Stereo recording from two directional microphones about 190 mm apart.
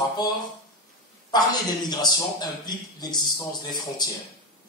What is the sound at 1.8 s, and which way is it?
A man's voice, 20° left (ahead or behind).